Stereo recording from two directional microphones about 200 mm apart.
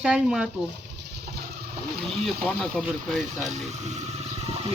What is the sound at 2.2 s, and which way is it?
Speech, 5° left (ahead or behind).